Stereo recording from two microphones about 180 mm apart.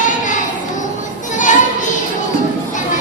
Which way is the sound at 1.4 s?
45° left (ahead or behind).